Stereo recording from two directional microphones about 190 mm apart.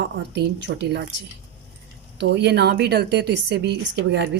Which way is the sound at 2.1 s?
65° right (ahead or behind).